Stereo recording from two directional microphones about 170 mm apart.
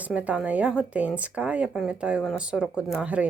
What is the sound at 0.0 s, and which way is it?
Speech, 10° right (ahead or behind).